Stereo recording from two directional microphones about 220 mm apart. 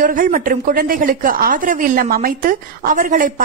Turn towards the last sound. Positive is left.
turn(degrees=-35)  # may be behind; listen again after turning